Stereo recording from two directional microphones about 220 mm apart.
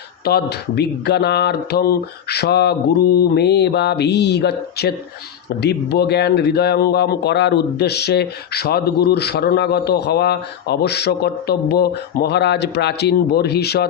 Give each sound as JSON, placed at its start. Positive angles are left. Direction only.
{"t": 0.3, "sound": "speech", "side_deg": 45}